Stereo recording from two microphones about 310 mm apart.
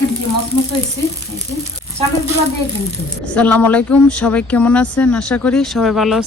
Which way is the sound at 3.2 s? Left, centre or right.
Centre.